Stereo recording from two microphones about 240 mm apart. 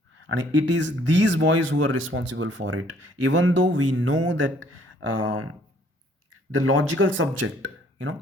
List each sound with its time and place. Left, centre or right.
0.3 s speech: right